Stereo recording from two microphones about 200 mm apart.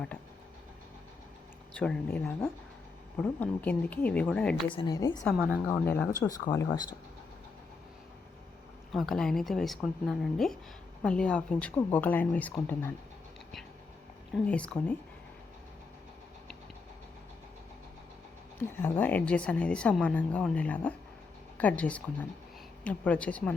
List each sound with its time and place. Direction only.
1.7 s speech: 5° left (ahead or behind)
4.7 s a woman's voice: 20° left (ahead or behind)
5.2 s a woman's voice: centre (ahead or behind)
5.6 s speech: 10° left (ahead or behind)
8.9 s a woman's voice: centre (ahead or behind)
14.3 s a woman's voice: 5° left (ahead or behind)
18.8 s speech: 10° left (ahead or behind)